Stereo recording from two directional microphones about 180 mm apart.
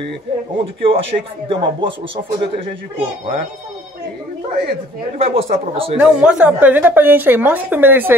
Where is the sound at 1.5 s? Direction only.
30° right (ahead or behind).